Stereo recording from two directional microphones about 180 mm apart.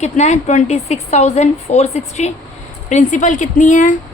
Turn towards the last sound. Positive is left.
turn(degrees=45)  # may be behind; listen again after turning